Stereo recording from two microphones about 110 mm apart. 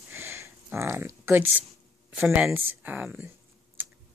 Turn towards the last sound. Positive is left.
turn(degrees=-15)  # may be behind; listen again after turning